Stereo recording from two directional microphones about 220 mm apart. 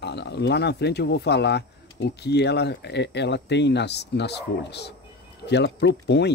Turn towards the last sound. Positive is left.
turn(degrees=50)  # may be behind; listen again after turning